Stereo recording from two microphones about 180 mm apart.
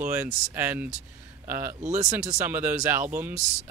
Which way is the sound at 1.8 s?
40° right (ahead or behind).